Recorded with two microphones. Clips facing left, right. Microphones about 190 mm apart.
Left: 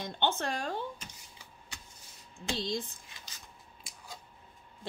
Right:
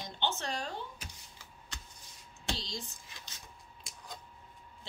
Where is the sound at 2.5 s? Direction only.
55° left (ahead or behind).